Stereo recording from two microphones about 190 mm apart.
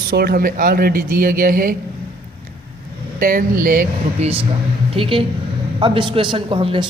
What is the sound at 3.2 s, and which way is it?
Speech, 45° right (ahead or behind).